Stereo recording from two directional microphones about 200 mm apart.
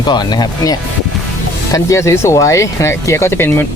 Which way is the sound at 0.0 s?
20° left (ahead or behind).